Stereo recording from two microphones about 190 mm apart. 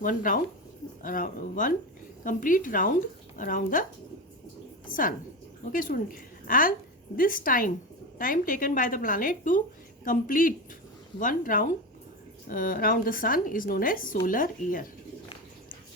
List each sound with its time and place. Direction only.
0.0 s speech: 45° left (ahead or behind)
4.9 s speech: 45° left (ahead or behind)